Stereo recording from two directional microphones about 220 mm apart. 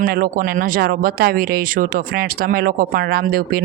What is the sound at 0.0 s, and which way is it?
Speech, 40° right (ahead or behind).